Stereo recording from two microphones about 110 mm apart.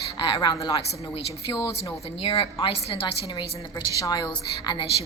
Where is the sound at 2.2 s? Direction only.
60° left (ahead or behind); by 4.8 s 45° left (ahead or behind).